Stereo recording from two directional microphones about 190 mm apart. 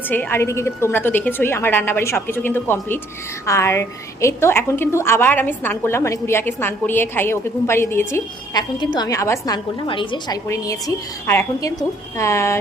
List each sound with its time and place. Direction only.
0.1 s a woman's voice: 10° left (ahead or behind)